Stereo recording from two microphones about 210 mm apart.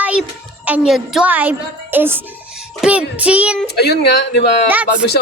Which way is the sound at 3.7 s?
50° left (ahead or behind).